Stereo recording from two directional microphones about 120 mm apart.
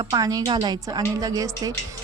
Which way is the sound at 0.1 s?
30° right (ahead or behind).